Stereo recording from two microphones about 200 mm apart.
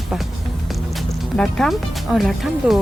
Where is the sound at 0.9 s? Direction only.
Centre (ahead or behind).